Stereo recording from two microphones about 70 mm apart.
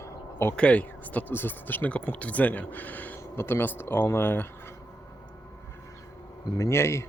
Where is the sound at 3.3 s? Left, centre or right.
Left.